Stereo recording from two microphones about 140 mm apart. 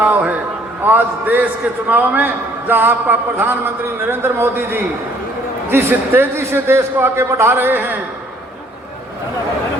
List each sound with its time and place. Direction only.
0.0 s a man's voice: 10° right (ahead or behind)